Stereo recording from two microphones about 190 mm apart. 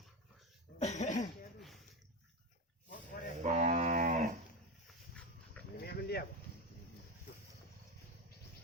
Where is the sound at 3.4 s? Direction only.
40° right (ahead or behind).